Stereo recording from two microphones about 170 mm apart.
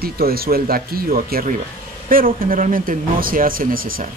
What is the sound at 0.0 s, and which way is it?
Speech, 60° right (ahead or behind).